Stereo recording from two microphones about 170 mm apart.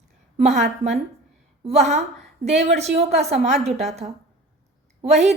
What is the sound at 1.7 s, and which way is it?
A woman's voice, 40° right (ahead or behind).